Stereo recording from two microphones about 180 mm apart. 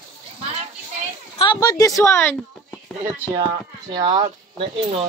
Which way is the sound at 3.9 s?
30° right (ahead or behind).